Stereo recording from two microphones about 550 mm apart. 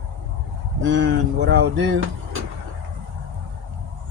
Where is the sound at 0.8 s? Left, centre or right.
Centre.